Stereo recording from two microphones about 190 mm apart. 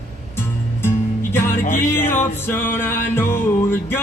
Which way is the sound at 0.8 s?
10° left (ahead or behind).